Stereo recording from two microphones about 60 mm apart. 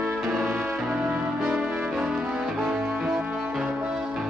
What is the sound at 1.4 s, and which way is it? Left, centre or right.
Brass instrument, centre.